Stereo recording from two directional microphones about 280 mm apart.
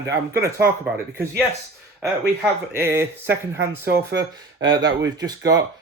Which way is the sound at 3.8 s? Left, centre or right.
Right.